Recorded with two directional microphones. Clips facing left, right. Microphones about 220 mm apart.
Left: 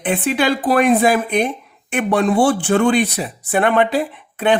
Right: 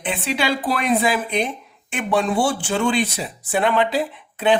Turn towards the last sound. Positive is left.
turn(degrees=55)  # may be behind; listen again after turning